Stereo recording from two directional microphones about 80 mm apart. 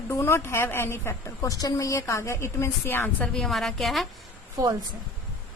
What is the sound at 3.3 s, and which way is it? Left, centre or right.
Speech, centre.